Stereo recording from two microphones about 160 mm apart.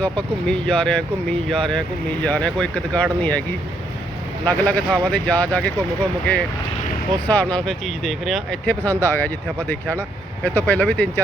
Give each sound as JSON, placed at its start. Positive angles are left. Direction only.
{"t": 0.0, "sound": "speech", "side_deg": 5}
{"t": 4.4, "sound": "speech", "side_deg": 10}
{"t": 7.3, "sound": "speech", "side_deg": 10}
{"t": 10.4, "sound": "speech", "side_deg": 10}